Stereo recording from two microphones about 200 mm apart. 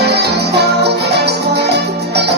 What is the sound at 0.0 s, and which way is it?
Music, 55° right (ahead or behind).